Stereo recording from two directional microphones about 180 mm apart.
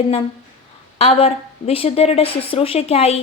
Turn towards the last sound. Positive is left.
turn(degrees=35)  # may be behind; listen again after turning